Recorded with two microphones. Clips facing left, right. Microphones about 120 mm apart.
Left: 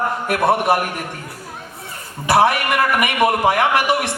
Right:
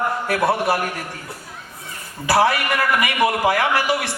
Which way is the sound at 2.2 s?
20° left (ahead or behind).